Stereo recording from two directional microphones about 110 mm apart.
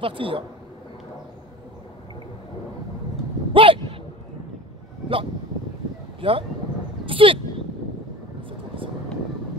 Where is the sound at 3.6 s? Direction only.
55° right (ahead or behind).